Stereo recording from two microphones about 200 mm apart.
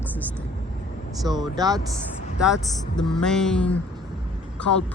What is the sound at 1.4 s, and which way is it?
Speech, 20° right (ahead or behind).